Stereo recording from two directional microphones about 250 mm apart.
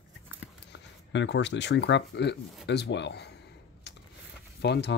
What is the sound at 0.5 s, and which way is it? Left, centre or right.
Speech, left.